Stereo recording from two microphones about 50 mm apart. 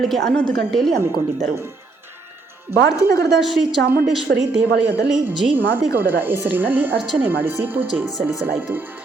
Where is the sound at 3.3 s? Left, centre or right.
Centre.